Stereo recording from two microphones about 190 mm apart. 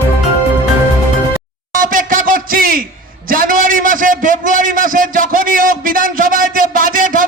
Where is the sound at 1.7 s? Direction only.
45° right (ahead or behind).